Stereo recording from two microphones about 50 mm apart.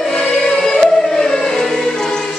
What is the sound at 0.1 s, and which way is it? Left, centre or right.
Choir, centre.